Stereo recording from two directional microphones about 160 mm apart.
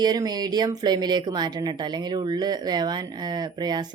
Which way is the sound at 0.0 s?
25° right (ahead or behind).